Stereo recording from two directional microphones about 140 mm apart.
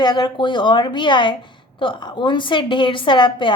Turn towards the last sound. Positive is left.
turn(degrees=35)  # may be behind; listen again after turning